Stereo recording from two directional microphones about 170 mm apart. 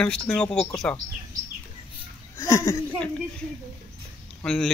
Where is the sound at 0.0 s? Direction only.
5° left (ahead or behind).